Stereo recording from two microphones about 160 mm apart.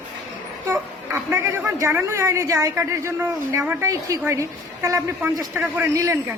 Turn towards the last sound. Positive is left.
turn(degrees=-15)  # may be behind; listen again after turning